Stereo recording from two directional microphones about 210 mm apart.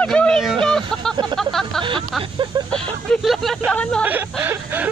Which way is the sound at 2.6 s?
5° left (ahead or behind).